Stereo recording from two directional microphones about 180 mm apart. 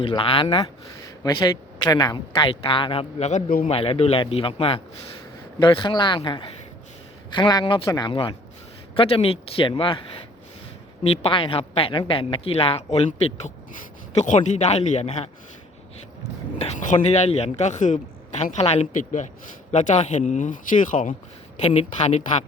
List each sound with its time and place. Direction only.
0.0 s a woman's voice: 30° left (ahead or behind)
11.0 s a woman's voice: 35° left (ahead or behind)
16.6 s a woman's voice: 35° left (ahead or behind)